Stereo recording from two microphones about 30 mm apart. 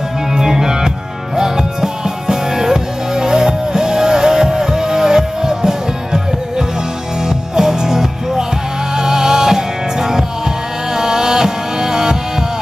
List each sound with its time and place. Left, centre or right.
0.4 s music: centre
7.2 s music: centre